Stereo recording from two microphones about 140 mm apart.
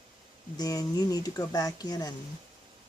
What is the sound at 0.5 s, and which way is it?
Speech, 25° left (ahead or behind).